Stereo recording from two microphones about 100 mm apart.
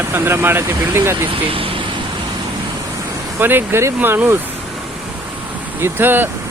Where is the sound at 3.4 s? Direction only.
20° right (ahead or behind).